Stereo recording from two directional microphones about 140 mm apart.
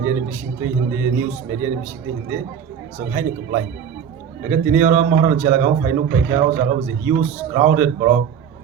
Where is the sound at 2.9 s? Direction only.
20° right (ahead or behind).